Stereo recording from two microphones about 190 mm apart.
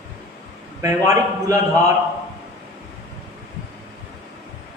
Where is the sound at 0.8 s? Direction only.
15° right (ahead or behind).